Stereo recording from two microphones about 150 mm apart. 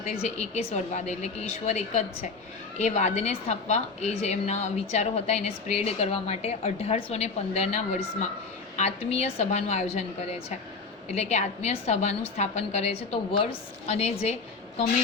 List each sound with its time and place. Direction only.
0.2 s a woman's voice: 50° left (ahead or behind)
11.1 s a woman's voice: 50° left (ahead or behind)